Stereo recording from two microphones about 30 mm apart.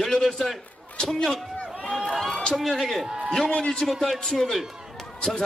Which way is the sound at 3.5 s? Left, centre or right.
Left.